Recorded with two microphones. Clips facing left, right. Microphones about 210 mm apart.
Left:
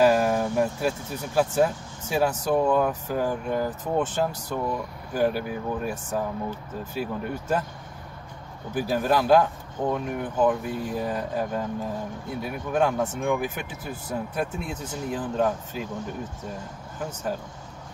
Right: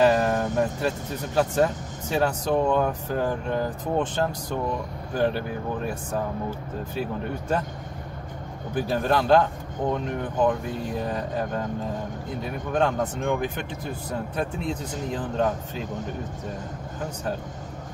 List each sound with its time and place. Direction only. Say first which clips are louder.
0.0 s speech: even; 5° left (ahead or behind)
7.0 s speech: even; 5° left (ahead or behind)
8.7 s speech: even; 5° left (ahead or behind)